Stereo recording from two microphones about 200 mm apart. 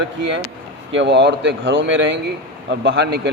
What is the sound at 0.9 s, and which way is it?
A man's voice, 60° right (ahead or behind).